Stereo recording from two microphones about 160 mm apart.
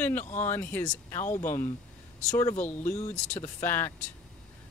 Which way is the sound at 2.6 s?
45° left (ahead or behind).